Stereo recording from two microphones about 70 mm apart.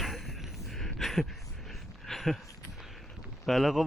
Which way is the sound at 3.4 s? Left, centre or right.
Centre.